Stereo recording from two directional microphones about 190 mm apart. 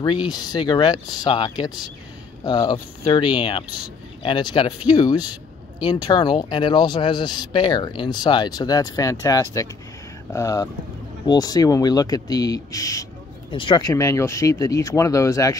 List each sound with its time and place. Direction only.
0.0 s speech: 25° left (ahead or behind)